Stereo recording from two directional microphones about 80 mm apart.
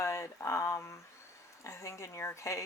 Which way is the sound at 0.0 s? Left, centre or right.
Left.